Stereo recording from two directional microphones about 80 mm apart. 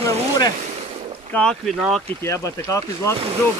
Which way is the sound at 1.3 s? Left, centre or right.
Centre.